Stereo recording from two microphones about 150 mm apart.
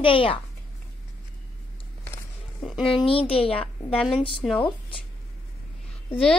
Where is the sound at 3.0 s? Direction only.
35° left (ahead or behind).